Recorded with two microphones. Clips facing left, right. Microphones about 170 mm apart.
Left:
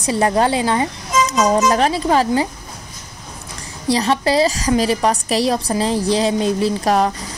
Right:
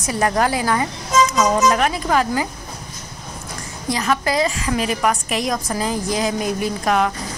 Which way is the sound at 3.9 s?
30° left (ahead or behind).